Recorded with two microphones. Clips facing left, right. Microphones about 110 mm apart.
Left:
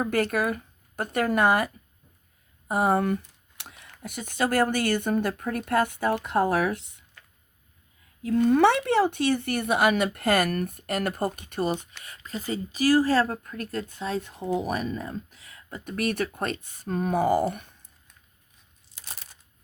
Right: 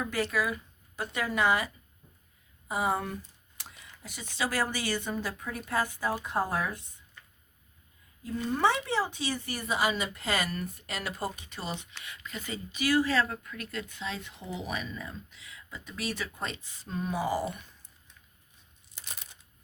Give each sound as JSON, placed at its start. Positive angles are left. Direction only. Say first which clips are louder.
{"t": 0.0, "sound": "speech", "louder": "left 5 dB", "side_deg": 50}
{"t": 8.2, "sound": "speech", "louder": "left 8 dB", "side_deg": 75}